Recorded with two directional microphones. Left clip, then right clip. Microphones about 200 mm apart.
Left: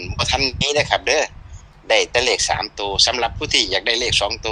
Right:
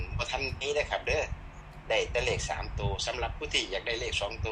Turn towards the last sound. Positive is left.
turn(degrees=60)  # may be behind; listen again after turning